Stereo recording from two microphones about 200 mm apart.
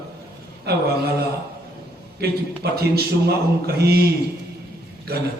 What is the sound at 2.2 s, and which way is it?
A man's voice, 50° right (ahead or behind).